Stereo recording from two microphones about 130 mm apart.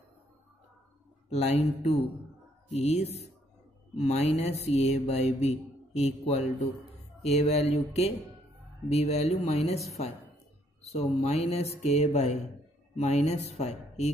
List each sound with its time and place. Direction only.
1.3 s mantra: 60° left (ahead or behind)
8.8 s speech: 55° left (ahead or behind)
10.8 s mantra: 55° left (ahead or behind)